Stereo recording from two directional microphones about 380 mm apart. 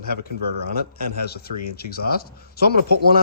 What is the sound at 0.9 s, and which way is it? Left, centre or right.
Speech, left.